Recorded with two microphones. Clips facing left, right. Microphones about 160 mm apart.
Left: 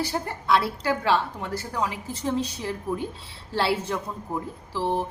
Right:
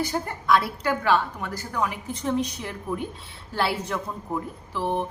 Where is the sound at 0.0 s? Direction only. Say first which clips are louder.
Right 1 dB; 30° left (ahead or behind).